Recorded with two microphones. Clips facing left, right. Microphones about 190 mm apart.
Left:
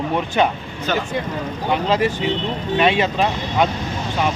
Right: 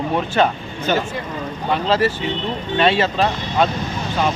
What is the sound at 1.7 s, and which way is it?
Speech, 15° left (ahead or behind).